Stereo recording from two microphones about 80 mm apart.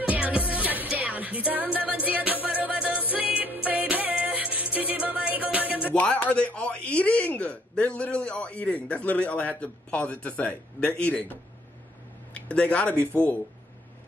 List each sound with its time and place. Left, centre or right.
0.0 s music: centre
5.9 s speech: centre
12.4 s speech: centre